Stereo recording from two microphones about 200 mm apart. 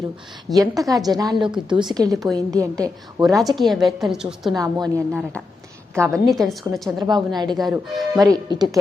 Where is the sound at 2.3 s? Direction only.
15° right (ahead or behind).